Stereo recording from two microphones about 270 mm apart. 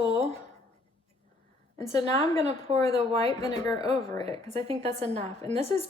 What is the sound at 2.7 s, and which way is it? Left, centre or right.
Speech, right.